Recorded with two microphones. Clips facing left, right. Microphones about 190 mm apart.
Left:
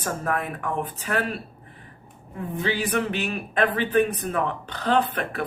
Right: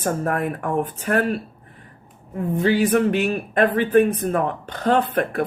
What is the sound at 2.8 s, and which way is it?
Speech, 50° right (ahead or behind).